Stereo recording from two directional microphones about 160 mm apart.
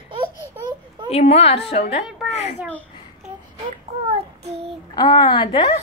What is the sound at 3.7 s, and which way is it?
A child's voice, 40° right (ahead or behind).